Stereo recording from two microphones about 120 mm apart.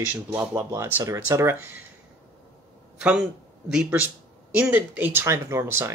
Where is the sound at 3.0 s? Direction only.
5° right (ahead or behind).